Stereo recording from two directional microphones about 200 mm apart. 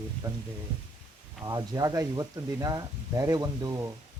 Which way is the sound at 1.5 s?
20° right (ahead or behind).